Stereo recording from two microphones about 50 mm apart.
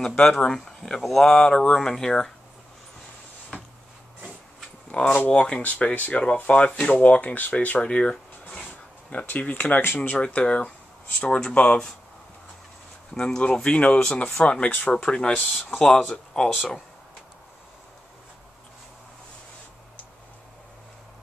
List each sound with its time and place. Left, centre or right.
0.0 s speech: centre
1.3 s speech: centre
4.9 s speech: left
9.1 s speech: left
13.7 s speech: left
15.0 s speech: centre
15.7 s speech: centre